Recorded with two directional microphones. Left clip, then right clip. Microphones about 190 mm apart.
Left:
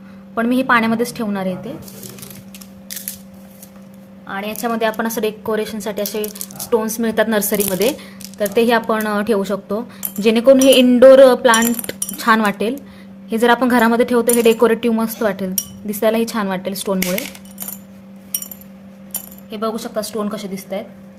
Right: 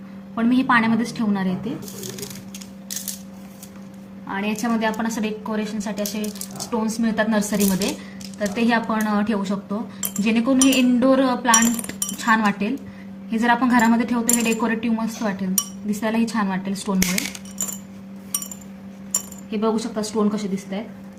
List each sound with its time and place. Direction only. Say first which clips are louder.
0.3 s speech: left 4 dB; 60° left (ahead or behind)
4.4 s speech: left 4 dB; 60° left (ahead or behind)
19.5 s a woman's voice: left 1 dB; 55° left (ahead or behind)